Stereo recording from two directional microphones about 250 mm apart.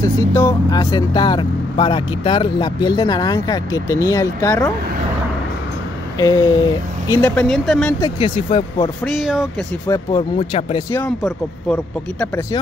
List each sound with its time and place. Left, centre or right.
0.0 s speech: centre
6.1 s a sound: centre
7.1 s speech: centre
8.0 s speech: left
9.0 s speech: centre
9.8 s speech: centre